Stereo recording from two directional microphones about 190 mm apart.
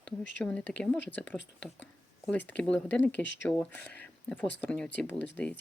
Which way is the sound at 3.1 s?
70° left (ahead or behind).